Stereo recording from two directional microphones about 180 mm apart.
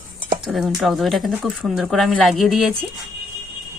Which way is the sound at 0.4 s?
Centre (ahead or behind).